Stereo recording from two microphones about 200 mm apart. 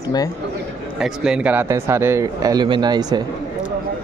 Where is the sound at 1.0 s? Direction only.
5° right (ahead or behind); by 3.2 s 20° right (ahead or behind).